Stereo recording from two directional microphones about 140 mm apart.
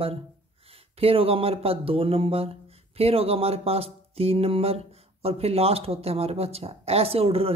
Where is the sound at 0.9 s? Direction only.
45° right (ahead or behind).